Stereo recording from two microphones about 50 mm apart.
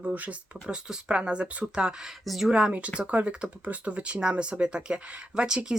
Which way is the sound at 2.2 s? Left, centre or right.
Centre.